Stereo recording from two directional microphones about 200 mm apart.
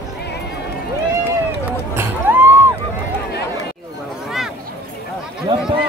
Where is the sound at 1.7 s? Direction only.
10° right (ahead or behind).